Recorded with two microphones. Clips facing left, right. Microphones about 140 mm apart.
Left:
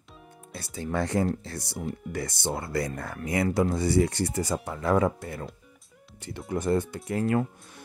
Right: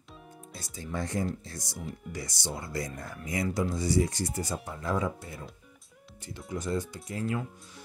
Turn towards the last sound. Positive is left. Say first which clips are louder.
# left 7 dB
turn(degrees=60)  # may be behind; listen again after turning